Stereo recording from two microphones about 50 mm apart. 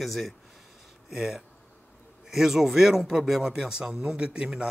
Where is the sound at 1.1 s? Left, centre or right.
Centre.